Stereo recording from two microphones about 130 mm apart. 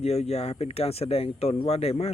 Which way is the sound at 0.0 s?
55° left (ahead or behind).